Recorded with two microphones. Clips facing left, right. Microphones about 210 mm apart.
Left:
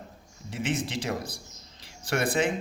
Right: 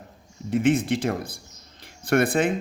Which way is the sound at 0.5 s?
55° right (ahead or behind).